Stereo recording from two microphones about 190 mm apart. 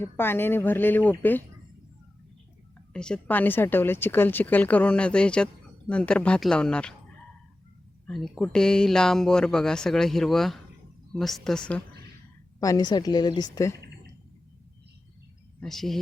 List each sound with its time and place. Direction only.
0.0 s a woman's voice: 10° left (ahead or behind)
2.9 s a woman's voice: 5° left (ahead or behind)
8.0 s speech: 5° left (ahead or behind)
12.5 s a woman's voice: 20° left (ahead or behind)
15.6 s speech: centre (ahead or behind)